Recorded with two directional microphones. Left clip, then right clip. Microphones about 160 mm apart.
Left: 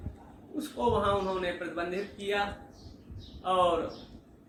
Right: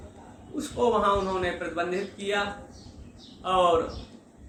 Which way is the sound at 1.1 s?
20° right (ahead or behind).